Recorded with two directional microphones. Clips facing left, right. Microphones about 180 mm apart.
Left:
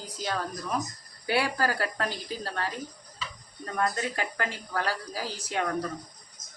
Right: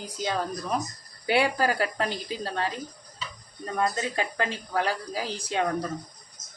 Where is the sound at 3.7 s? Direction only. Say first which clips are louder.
Right 2 dB; 20° right (ahead or behind).